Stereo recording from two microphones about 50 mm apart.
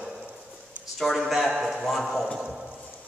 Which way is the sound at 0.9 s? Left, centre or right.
Centre.